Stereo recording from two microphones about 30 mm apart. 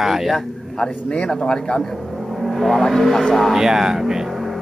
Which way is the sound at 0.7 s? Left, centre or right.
Left.